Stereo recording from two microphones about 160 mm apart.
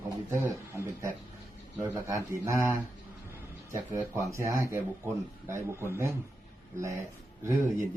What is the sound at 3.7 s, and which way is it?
Speech, 20° right (ahead or behind).